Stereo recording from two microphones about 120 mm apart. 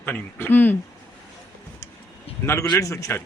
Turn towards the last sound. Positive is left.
turn(degrees=25)  # may be behind; listen again after turning